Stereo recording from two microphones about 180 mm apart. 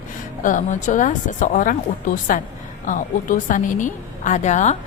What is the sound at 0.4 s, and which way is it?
A woman's voice, 45° left (ahead or behind).